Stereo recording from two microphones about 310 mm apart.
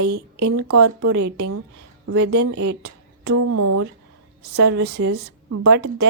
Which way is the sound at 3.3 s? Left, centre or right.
Right.